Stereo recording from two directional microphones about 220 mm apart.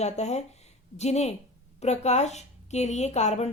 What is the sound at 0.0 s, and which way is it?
A woman's voice, 30° left (ahead or behind).